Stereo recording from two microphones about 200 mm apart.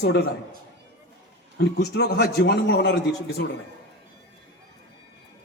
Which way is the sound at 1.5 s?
55° left (ahead or behind).